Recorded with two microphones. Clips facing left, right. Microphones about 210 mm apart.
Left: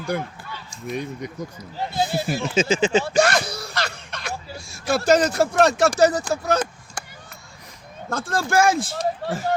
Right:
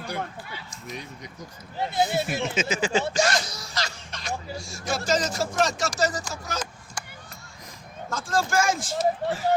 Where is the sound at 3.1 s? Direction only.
60° left (ahead or behind).